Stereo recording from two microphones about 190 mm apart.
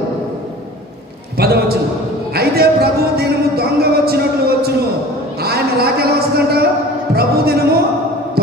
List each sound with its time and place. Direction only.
1.3 s a man's voice: 55° right (ahead or behind)
2.3 s music: 55° right (ahead or behind)
5.4 s speech: 55° right (ahead or behind)
7.2 s heart sounds: 55° right (ahead or behind)